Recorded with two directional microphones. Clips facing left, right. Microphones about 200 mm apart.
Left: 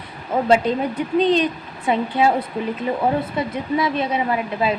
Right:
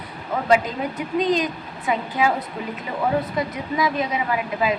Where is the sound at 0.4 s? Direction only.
30° left (ahead or behind).